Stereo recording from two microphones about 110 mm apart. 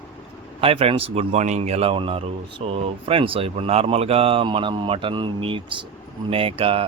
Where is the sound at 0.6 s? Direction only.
60° right (ahead or behind).